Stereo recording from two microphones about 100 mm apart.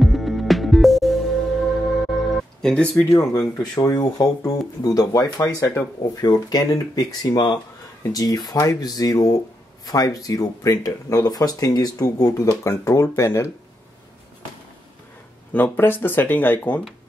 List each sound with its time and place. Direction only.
0.0 s music: centre (ahead or behind)
3.1 s speech: 35° left (ahead or behind)
12.4 s speech: 30° left (ahead or behind)
15.5 s speech: 20° left (ahead or behind)